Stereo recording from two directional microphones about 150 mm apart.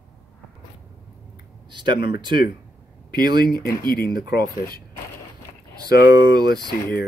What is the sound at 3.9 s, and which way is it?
Speech, 90° left.